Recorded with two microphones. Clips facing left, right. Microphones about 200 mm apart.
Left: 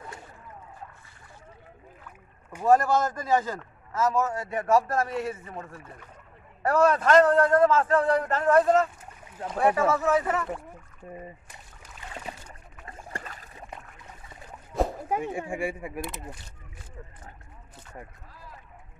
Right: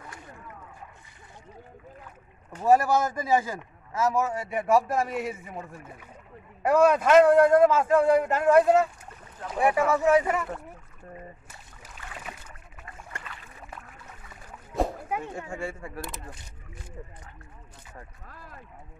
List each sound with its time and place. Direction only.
2.6 s speech: 10° right (ahead or behind)
12.8 s boat: 35° left (ahead or behind)
14.7 s rowboat: centre (ahead or behind)
15.1 s speech: 15° left (ahead or behind)
18.3 s a sound: 55° right (ahead or behind)